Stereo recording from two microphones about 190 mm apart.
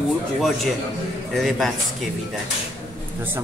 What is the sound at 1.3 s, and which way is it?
Speech, centre (ahead or behind).